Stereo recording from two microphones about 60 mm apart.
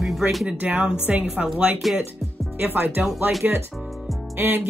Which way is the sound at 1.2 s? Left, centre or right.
Centre.